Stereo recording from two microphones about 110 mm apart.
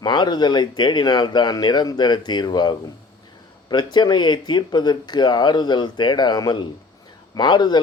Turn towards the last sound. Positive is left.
turn(degrees=40)  # may be behind; listen again after turning